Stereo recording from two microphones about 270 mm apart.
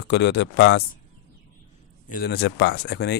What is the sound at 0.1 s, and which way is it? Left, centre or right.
Speech, left.